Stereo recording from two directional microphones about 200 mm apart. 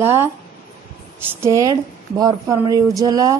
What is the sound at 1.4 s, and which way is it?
A woman's voice, 15° right (ahead or behind).